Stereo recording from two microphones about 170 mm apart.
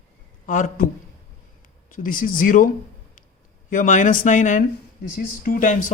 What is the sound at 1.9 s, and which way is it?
Speech, 50° left (ahead or behind).